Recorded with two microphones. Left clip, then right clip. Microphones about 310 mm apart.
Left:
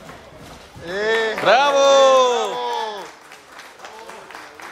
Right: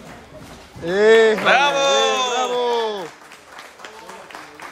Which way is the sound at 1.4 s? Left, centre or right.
Centre.